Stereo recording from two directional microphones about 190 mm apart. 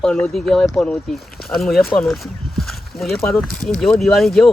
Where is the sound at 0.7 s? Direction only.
5° left (ahead or behind).